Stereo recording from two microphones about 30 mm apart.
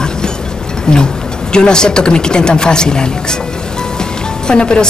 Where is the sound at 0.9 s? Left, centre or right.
Left.